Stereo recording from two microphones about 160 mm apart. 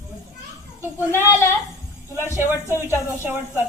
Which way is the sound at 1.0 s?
15° left (ahead or behind).